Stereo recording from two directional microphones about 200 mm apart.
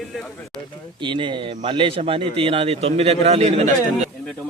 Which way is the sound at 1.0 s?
25° right (ahead or behind).